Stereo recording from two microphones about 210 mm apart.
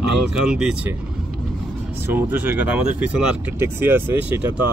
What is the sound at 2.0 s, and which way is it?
Speech, 10° right (ahead or behind).